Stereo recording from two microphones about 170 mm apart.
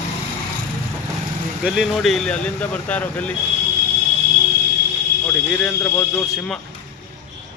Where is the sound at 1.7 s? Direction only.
Centre (ahead or behind).